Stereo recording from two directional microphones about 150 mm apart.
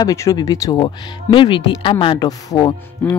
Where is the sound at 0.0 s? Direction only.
20° left (ahead or behind).